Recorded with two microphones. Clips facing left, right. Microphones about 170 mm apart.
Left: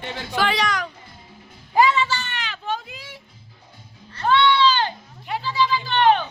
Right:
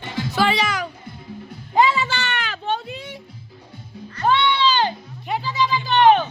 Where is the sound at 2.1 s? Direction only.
65° right (ahead or behind).